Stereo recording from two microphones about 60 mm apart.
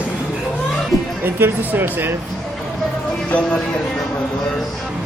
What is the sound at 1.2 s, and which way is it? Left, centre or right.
Speech, right.